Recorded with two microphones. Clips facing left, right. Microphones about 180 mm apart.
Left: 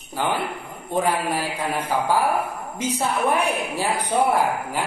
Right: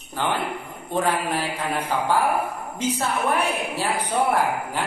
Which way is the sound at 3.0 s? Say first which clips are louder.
Left 3 dB; 15° left (ahead or behind).